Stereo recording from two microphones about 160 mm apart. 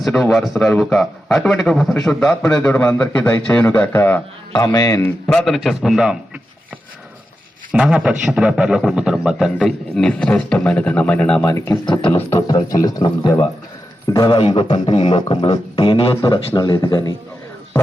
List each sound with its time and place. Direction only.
0.0 s a man's voice: centre (ahead or behind)
4.5 s a man's voice: 25° left (ahead or behind)
5.0 s a man's voice: 10° left (ahead or behind)
7.7 s a man's voice: 5° right (ahead or behind)
11.4 s a man's voice: 20° left (ahead or behind)
16.6 s a man's voice: 25° left (ahead or behind)